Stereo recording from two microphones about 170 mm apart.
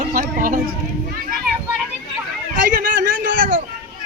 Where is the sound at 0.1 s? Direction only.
55° right (ahead or behind).